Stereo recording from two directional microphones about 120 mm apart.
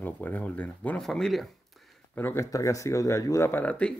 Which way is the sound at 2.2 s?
15° left (ahead or behind).